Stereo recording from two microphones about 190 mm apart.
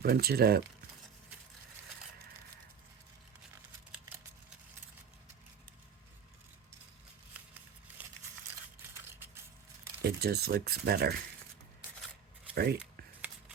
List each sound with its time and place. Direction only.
0.0 s speech: 55° right (ahead or behind)
10.0 s speech: 55° right (ahead or behind)
12.5 s speech: 55° right (ahead or behind)